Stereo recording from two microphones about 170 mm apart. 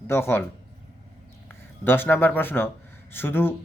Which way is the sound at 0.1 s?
15° left (ahead or behind).